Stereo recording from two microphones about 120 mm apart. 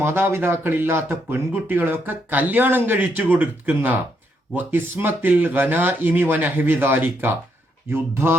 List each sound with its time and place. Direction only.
0.0 s speech: 20° right (ahead or behind)